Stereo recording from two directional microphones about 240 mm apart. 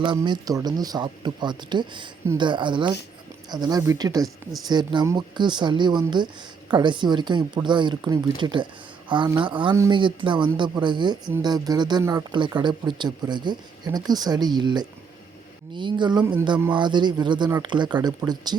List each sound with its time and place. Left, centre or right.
0.0 s speech: centre